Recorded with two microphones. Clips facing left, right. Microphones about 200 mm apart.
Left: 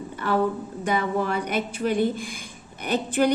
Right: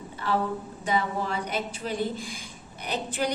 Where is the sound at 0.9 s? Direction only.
60° left (ahead or behind).